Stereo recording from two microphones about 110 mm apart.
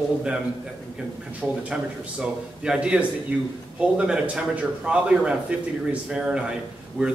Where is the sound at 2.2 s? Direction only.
10° right (ahead or behind).